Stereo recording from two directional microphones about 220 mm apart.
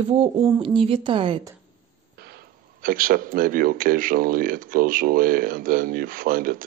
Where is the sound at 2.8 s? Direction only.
40° right (ahead or behind).